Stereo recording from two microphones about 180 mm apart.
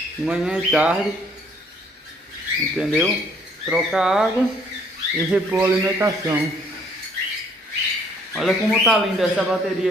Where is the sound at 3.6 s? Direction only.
5° right (ahead or behind).